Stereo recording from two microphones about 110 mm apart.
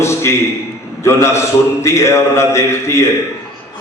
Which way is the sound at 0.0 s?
25° left (ahead or behind).